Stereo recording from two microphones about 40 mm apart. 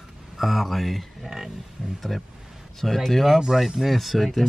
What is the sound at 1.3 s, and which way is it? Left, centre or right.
Speech, centre.